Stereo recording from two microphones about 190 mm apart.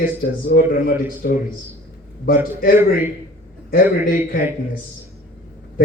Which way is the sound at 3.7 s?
50° left (ahead or behind).